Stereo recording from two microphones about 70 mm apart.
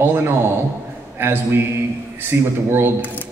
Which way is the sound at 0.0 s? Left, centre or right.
Right.